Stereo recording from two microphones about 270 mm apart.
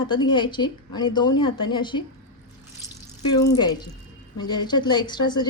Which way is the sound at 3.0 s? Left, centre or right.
Centre.